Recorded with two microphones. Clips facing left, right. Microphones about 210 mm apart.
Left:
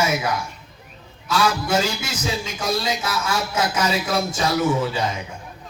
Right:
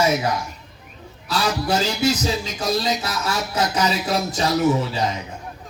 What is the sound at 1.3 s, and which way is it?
A man's voice, 35° right (ahead or behind).